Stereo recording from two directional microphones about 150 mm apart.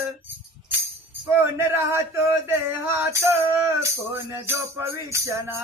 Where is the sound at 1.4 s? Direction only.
15° right (ahead or behind).